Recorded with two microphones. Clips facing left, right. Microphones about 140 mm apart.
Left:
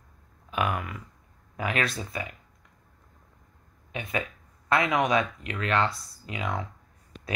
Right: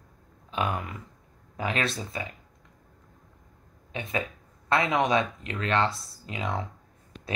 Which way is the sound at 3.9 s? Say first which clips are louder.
Even; 30° right (ahead or behind).